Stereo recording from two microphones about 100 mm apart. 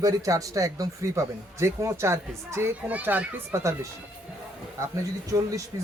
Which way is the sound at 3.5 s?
30° right (ahead or behind).